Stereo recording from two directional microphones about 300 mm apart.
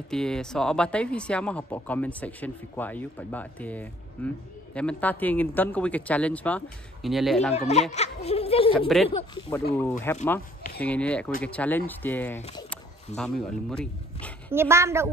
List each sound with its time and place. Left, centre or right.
0.1 s speech: centre
7.5 s a child's voice: left
8.7 s speech: centre
9.1 s speech: centre
14.5 s a woman's voice: centre